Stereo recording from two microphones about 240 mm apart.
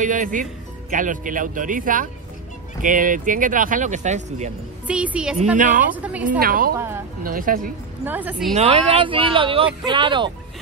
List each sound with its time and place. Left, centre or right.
0.0 s speech: right
4.8 s a woman's voice: centre
5.6 s speech: right
5.9 s a woman's voice: centre
6.4 s speech: right
8.0 s a woman's voice: centre
8.5 s speech: right